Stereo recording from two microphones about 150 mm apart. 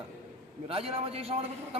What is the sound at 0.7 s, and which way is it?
Speech, 40° right (ahead or behind).